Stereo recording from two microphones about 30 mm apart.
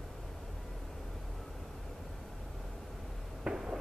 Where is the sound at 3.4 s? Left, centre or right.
Right.